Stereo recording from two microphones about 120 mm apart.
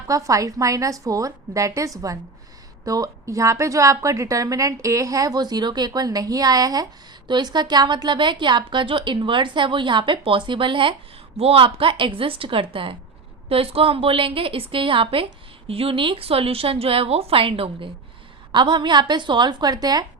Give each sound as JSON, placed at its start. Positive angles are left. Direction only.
{"t": 0.1, "sound": "a woman's voice", "side_deg": -30}